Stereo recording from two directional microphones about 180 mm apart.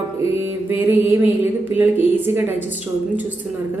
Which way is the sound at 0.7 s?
10° right (ahead or behind).